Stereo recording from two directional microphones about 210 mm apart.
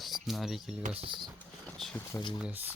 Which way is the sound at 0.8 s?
25° right (ahead or behind).